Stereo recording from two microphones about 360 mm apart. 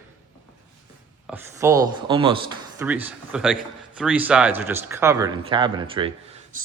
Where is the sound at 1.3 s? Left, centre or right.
Centre.